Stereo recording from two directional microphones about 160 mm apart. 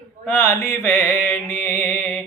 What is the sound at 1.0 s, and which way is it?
Mantra, 15° left (ahead or behind).